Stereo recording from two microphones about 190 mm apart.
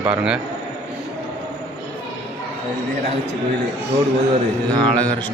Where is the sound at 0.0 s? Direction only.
5° right (ahead or behind).